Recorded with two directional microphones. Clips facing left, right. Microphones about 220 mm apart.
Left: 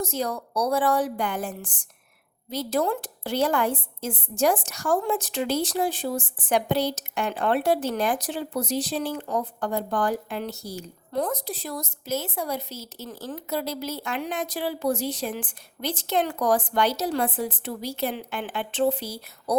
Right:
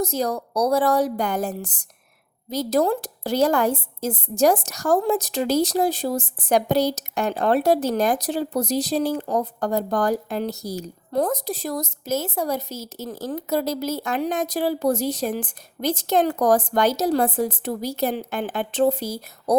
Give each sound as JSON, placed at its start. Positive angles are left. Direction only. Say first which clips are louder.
{"t": 0.0, "sound": "a woman's voice", "louder": "right 4 dB", "side_deg": -40}